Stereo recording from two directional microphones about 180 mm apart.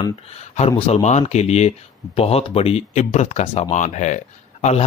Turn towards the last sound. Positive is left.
turn(degrees=40)  # may be behind; listen again after turning